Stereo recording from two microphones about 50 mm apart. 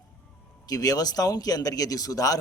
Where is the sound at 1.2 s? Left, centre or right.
Left.